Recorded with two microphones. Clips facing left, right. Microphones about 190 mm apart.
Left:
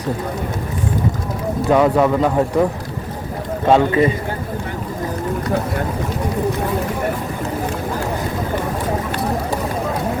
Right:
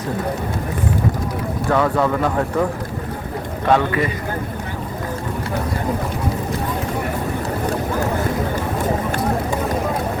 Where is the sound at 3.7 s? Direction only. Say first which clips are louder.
Left 3 dB; 25° left (ahead or behind).